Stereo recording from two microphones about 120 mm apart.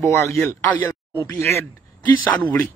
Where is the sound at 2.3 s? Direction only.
10° left (ahead or behind).